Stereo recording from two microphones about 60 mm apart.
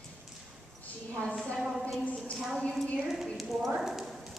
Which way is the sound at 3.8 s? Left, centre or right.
Centre.